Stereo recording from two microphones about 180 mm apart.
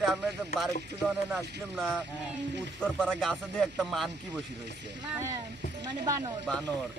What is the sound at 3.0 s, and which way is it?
Speech, centre (ahead or behind).